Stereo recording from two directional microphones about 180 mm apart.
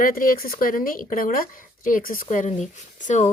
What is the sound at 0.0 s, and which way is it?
Speech, 50° left (ahead or behind).